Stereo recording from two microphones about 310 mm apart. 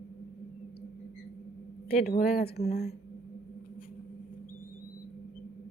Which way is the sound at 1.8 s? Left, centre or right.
Left.